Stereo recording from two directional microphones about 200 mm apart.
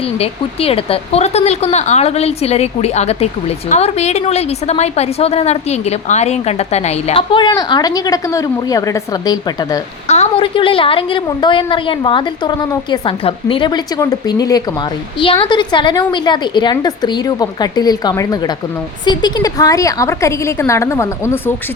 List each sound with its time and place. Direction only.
0.2 s a woman's voice: 30° left (ahead or behind)
10.1 s a woman's voice: 30° left (ahead or behind); by 21.5 s 15° left (ahead or behind)